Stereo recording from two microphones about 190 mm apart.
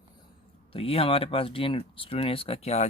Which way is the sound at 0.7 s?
30° left (ahead or behind).